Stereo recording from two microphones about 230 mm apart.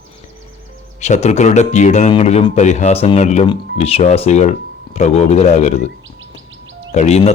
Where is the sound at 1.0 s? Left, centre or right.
Left.